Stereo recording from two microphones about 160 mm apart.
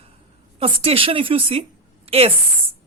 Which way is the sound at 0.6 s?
35° right (ahead or behind).